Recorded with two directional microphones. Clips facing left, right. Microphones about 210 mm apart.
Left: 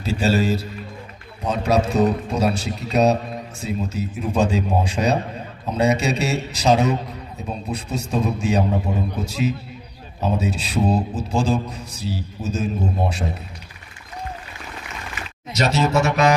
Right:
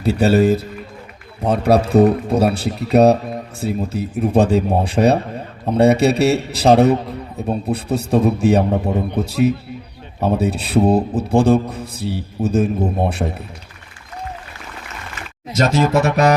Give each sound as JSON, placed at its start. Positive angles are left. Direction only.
{"t": 0.0, "sound": "speech", "side_deg": -60}
{"t": 15.4, "sound": "speech", "side_deg": -50}